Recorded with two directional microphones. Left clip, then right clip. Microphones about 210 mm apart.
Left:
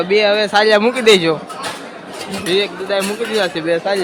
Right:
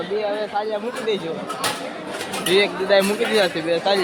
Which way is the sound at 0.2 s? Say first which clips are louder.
Left 11 dB; 50° left (ahead or behind).